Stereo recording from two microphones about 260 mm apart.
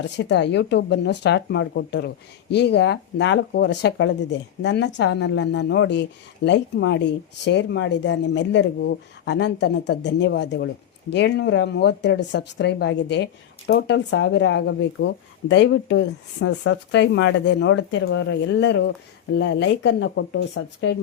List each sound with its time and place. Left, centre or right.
0.2 s speech: left